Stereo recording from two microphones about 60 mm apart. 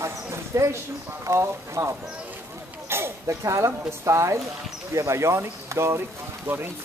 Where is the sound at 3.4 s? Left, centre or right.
Right.